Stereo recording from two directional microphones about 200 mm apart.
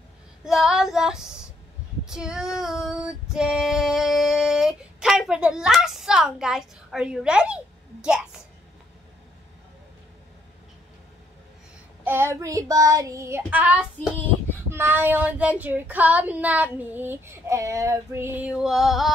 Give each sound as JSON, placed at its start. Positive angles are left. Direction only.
{"t": 0.5, "sound": "child singing", "side_deg": -5}
{"t": 2.0, "sound": "female singing", "side_deg": -5}
{"t": 12.0, "sound": "child singing", "side_deg": -10}